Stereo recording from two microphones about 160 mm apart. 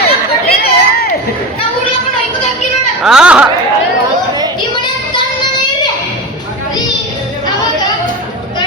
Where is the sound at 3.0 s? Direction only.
5° right (ahead or behind).